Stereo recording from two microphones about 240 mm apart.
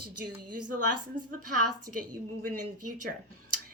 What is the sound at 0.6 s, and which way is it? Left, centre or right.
Speech, right.